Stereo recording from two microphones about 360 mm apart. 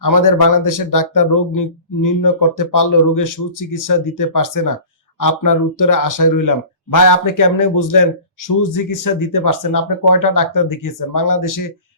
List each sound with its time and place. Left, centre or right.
0.0 s speech: left